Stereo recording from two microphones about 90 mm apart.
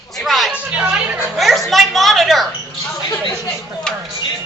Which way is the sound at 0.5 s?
10° right (ahead or behind).